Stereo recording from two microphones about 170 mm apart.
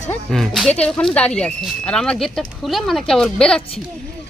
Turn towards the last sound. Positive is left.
turn(degrees=5)  # may be behind; listen again after turning